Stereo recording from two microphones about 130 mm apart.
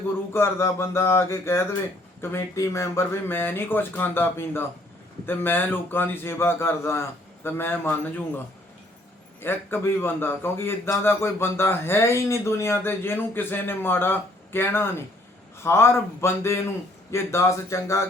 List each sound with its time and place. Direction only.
0.3 s a man's voice: 20° left (ahead or behind)
9.4 s a man's voice: 15° left (ahead or behind)